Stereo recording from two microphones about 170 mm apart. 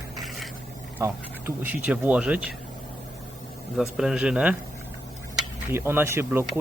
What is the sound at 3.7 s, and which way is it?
Speech, centre (ahead or behind).